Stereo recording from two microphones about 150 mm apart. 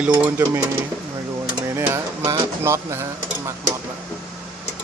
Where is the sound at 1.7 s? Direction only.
20° right (ahead or behind).